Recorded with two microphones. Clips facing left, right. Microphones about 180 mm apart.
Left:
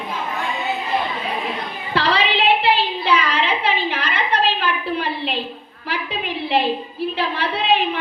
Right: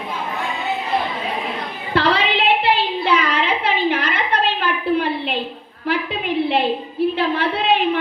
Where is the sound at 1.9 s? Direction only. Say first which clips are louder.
Right 1 dB; 55° right (ahead or behind).